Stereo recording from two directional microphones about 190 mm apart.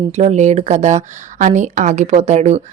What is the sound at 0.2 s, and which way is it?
Speech, 35° right (ahead or behind).